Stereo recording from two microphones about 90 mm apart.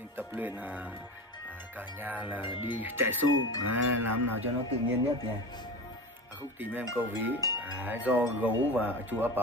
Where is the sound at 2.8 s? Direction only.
25° right (ahead or behind).